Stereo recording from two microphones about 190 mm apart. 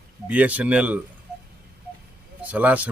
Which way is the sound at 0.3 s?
10° right (ahead or behind).